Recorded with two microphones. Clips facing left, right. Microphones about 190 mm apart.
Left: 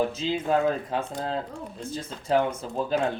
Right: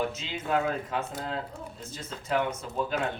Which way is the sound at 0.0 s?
35° left (ahead or behind).